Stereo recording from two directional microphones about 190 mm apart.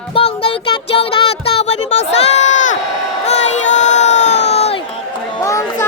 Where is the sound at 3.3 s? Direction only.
35° left (ahead or behind).